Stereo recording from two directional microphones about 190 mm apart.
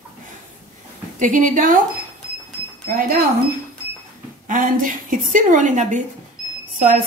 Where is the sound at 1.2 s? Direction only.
45° right (ahead or behind).